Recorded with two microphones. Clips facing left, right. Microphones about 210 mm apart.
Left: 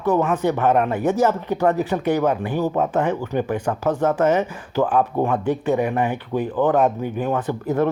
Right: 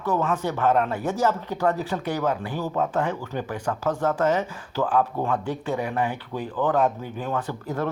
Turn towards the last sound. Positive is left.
turn(degrees=20)  # may be behind; listen again after turning